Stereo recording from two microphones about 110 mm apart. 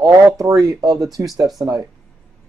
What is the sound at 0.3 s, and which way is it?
Speech, 30° right (ahead or behind).